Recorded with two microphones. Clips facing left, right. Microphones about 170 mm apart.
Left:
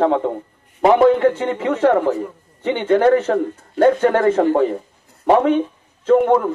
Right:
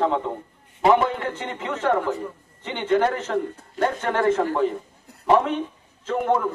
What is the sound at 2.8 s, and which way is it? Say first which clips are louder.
A man's voice: left 7 dB; 55° left (ahead or behind).